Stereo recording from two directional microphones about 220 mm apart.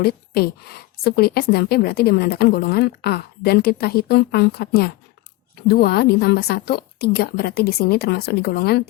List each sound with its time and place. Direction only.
0.0 s a woman's voice: 45° left (ahead or behind)